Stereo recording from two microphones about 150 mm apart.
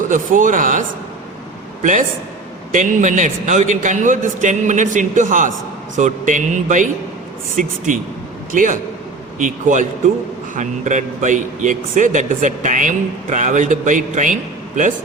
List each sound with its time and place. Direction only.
0.1 s a man's voice: 60° right (ahead or behind)